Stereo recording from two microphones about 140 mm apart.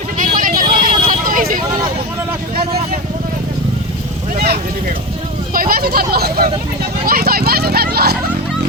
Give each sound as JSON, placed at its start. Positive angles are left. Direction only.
{"t": 0.2, "sound": "vehicle", "side_deg": -75}
{"t": 5.5, "sound": "vehicle", "side_deg": -90}
{"t": 7.0, "sound": "a sound", "side_deg": -90}